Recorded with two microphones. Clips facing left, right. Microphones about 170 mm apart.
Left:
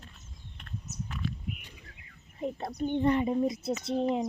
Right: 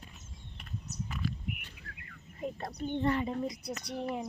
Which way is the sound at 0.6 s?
5° right (ahead or behind).